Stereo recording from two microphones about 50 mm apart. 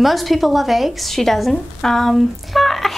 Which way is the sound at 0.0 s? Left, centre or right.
Centre.